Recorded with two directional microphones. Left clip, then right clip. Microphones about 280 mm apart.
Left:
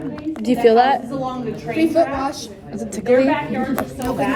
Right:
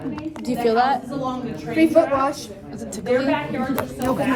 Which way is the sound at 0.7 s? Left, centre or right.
Left.